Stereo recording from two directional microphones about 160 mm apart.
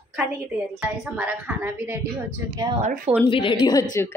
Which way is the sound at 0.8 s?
5° right (ahead or behind).